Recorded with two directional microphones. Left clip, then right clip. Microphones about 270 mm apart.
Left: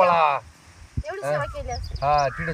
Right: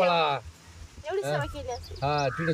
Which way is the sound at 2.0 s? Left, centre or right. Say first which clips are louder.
Left 7 dB; centre.